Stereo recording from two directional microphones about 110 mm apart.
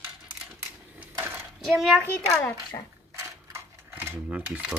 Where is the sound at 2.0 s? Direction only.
20° left (ahead or behind).